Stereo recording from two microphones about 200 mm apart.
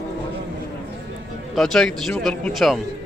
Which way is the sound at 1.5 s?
Centre (ahead or behind).